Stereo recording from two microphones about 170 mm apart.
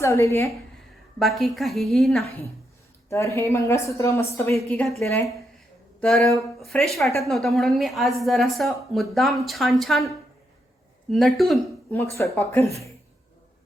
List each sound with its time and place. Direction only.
0.0 s a woman's voice: 15° left (ahead or behind)
1.2 s a woman's voice: centre (ahead or behind)
3.1 s a woman's voice: 15° left (ahead or behind)
4.7 s a woman's voice: 5° left (ahead or behind)
11.1 s speech: centre (ahead or behind)
12.1 s a woman's voice: 15° left (ahead or behind)